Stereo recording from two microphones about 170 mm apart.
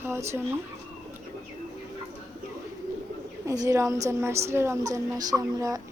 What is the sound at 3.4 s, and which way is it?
A woman's voice, 20° right (ahead or behind).